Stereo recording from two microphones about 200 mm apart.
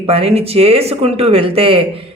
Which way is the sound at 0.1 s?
30° right (ahead or behind).